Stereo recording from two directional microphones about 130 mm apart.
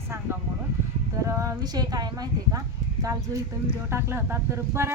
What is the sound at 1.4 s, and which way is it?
A woman's voice, 25° right (ahead or behind).